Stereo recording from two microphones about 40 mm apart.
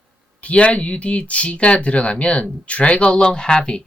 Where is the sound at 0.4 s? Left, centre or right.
Left.